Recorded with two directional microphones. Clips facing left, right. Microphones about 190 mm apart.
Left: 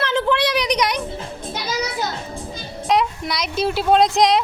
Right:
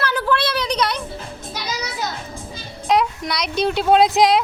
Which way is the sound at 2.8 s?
Centre (ahead or behind).